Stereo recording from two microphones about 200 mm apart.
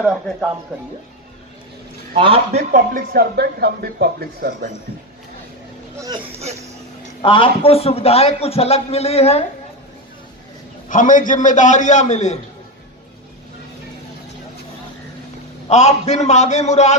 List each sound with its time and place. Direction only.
0.7 s speech: 5° right (ahead or behind)
2.1 s a man's voice: 25° right (ahead or behind)
2.6 s speech: 45° right (ahead or behind)
7.2 s a man's voice: 25° left (ahead or behind)
10.8 s a man's voice: 40° left (ahead or behind)
15.7 s a man's voice: 35° left (ahead or behind)